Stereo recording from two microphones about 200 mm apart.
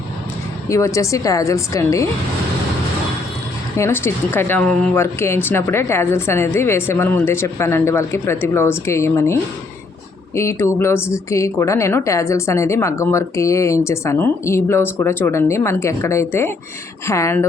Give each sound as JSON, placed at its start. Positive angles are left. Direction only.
{"t": 0.7, "sound": "speech", "side_deg": 15}
{"t": 3.8, "sound": "speech", "side_deg": 10}